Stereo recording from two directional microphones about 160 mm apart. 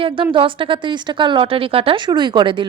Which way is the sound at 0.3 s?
35° right (ahead or behind).